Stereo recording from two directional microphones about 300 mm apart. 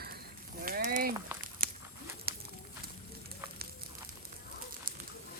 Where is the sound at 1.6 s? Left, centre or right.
Right.